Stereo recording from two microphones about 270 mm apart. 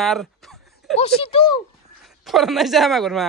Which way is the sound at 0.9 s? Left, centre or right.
Left.